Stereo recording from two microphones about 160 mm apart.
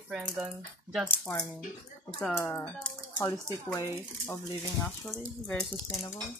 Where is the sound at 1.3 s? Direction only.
20° left (ahead or behind).